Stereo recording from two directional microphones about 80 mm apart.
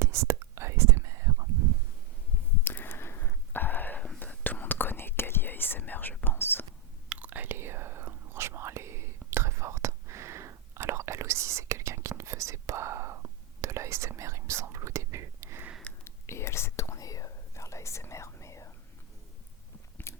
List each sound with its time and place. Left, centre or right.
0.0 s whispering: right
2.6 s a sound: left
4.2 s whispering: left
7.1 s whispering: right
16.0 s whispering: left
20.1 s biting: left